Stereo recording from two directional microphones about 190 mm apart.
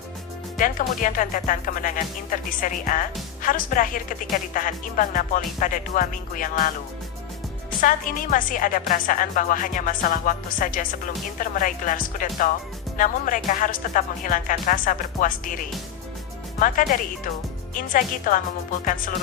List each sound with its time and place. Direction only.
0.5 s a woman's voice: 45° left (ahead or behind)
7.8 s a woman's voice: 45° left (ahead or behind)
16.6 s a woman's voice: 45° left (ahead or behind)